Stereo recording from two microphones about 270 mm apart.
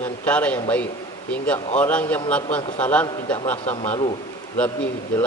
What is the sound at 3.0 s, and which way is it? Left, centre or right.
A man's voice, centre.